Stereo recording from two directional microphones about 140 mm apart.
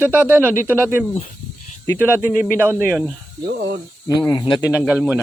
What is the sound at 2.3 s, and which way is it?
Speech, 10° left (ahead or behind).